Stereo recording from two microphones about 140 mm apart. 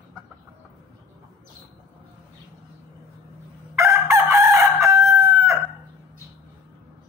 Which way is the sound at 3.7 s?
20° right (ahead or behind).